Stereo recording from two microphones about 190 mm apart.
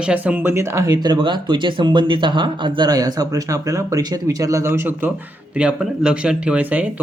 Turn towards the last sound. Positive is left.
turn(degrees=-5)  # may be behind; listen again after turning